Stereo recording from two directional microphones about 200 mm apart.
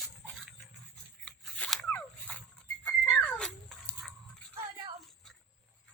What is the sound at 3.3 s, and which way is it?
Cat, 5° left (ahead or behind).